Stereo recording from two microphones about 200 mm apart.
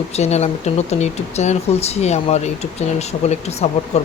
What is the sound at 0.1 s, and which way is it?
Speech, 35° left (ahead or behind).